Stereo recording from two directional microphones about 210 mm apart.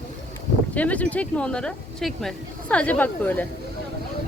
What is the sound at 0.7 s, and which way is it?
Speech, 5° left (ahead or behind).